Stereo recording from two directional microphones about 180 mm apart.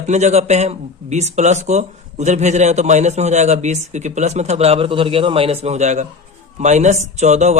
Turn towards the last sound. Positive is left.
turn(degrees=-40)  # may be behind; listen again after turning